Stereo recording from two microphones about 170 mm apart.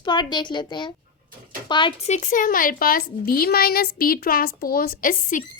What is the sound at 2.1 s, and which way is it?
A woman's voice, 45° left (ahead or behind).